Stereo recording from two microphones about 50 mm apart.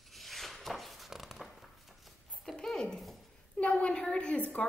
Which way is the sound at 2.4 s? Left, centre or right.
Centre.